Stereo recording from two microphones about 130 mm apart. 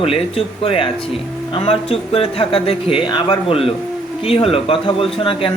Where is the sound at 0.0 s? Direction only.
50° left (ahead or behind).